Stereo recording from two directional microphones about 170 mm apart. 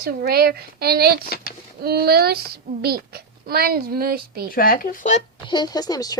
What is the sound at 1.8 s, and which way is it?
A child's voice, 65° right (ahead or behind).